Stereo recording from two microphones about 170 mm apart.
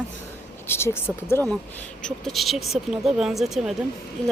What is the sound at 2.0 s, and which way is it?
Speech, centre (ahead or behind).